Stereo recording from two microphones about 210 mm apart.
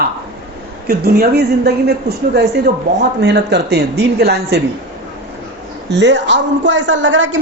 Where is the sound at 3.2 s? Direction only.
50° right (ahead or behind).